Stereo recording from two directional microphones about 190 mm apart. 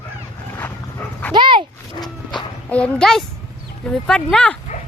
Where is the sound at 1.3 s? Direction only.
25° right (ahead or behind).